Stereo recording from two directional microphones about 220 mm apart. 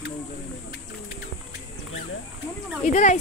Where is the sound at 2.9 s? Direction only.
35° left (ahead or behind).